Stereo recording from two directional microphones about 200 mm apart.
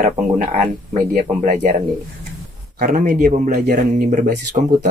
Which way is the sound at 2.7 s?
40° right (ahead or behind).